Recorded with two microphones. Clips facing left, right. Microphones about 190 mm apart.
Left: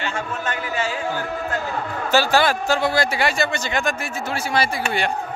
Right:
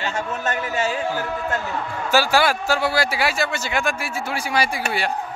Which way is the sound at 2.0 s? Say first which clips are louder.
Even; 10° right (ahead or behind).